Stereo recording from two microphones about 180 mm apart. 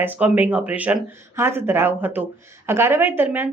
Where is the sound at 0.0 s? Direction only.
10° right (ahead or behind).